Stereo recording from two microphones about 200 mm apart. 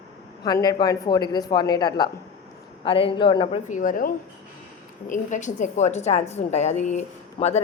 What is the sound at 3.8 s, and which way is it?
A woman's voice, 45° left (ahead or behind).